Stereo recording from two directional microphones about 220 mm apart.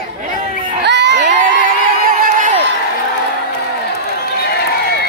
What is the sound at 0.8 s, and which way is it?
Crowd, 50° right (ahead or behind).